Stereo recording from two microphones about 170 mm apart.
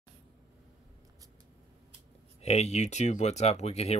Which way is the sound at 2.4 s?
40° left (ahead or behind).